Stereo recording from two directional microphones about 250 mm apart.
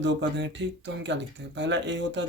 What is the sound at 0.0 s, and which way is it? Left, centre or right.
Speech, right.